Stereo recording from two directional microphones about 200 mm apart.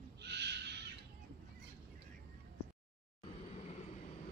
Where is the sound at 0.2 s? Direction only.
60° right (ahead or behind).